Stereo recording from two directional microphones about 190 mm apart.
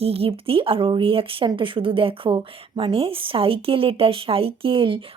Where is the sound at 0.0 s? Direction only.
30° right (ahead or behind).